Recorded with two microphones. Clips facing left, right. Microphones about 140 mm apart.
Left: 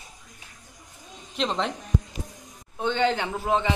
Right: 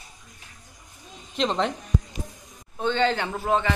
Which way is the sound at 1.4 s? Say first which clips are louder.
Right 2 dB; centre (ahead or behind).